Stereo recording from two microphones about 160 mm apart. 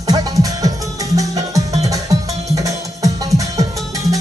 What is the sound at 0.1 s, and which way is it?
Music, 20° right (ahead or behind).